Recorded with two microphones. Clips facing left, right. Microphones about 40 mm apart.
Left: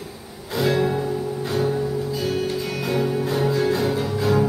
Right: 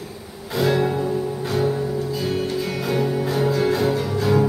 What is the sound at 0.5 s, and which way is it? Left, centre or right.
Music, centre.